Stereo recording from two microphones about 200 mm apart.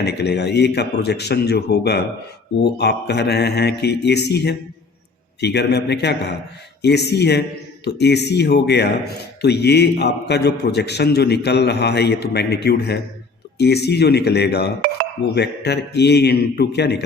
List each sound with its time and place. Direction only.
0.0 s speech: 55° left (ahead or behind)